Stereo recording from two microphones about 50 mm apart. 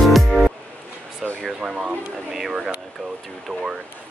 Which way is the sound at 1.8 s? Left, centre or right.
Right.